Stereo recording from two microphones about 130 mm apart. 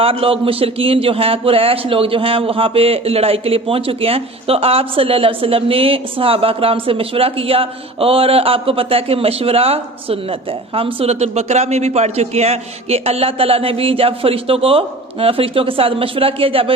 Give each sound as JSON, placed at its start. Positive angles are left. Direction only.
{"t": 0.0, "sound": "a man's voice", "side_deg": -45}